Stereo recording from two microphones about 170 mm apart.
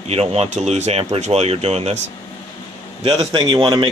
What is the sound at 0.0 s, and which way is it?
Speech, 40° right (ahead or behind).